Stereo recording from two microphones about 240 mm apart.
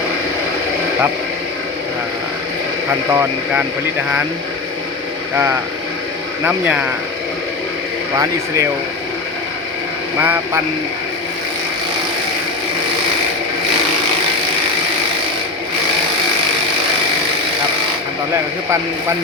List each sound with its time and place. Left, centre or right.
3.1 s speech: centre
6.4 s speech: centre
10.2 s speech: centre